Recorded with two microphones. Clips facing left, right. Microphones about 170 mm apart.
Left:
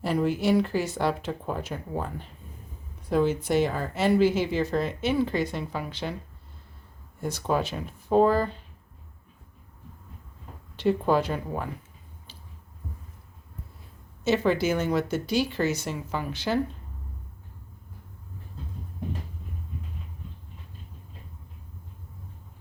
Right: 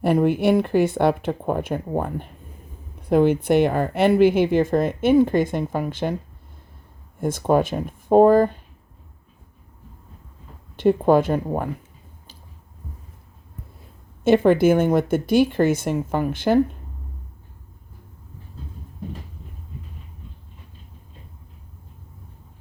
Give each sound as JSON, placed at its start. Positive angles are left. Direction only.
{"t": 0.0, "sound": "a woman's voice", "side_deg": -55}
{"t": 7.2, "sound": "a woman's voice", "side_deg": -50}
{"t": 10.8, "sound": "a woman's voice", "side_deg": -50}
{"t": 14.3, "sound": "a woman's voice", "side_deg": -55}